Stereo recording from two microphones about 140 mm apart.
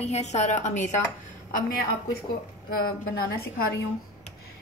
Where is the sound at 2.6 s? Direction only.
90° left.